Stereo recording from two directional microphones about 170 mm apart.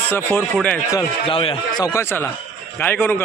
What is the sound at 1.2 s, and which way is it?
Speech, 30° left (ahead or behind).